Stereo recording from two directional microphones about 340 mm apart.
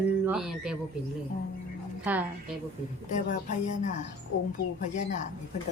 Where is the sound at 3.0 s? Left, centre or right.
Left.